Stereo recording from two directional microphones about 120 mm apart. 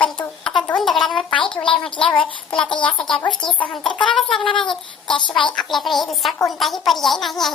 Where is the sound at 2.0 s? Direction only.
45° left (ahead or behind).